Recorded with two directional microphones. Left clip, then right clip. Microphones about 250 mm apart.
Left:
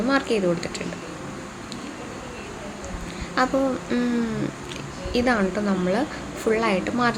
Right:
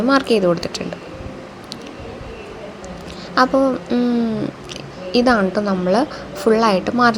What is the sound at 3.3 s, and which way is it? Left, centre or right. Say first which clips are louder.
Speech: right 7 dB; centre.